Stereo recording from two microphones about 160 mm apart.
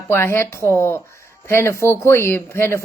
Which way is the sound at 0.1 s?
15° left (ahead or behind).